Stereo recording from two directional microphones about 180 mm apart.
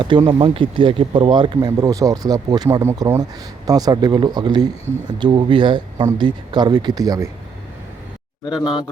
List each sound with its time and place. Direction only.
0.0 s speech: 25° right (ahead or behind)
8.4 s speech: 25° left (ahead or behind)